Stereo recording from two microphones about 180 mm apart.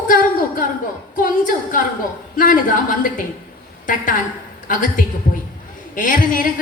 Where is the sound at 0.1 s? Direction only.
50° left (ahead or behind).